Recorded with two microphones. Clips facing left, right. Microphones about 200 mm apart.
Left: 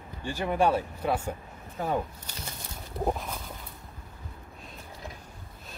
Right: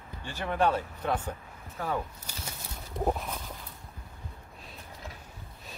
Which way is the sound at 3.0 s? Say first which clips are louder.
Even; centre (ahead or behind).